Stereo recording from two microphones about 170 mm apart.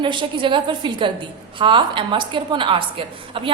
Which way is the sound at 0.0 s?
30° right (ahead or behind).